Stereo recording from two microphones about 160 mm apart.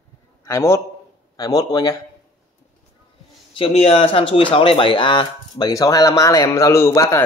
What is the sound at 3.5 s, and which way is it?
Speech, 40° left (ahead or behind).